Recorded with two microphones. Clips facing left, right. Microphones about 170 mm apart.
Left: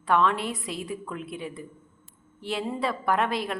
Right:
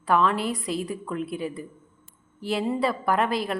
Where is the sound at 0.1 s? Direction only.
Centre (ahead or behind).